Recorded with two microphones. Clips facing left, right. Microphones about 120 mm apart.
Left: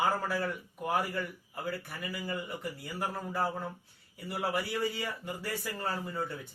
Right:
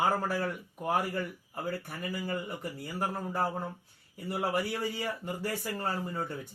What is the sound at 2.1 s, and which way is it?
Speech, 40° right (ahead or behind).